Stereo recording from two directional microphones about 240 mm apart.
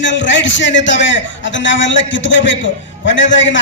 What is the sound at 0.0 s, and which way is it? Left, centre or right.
A man's voice, left.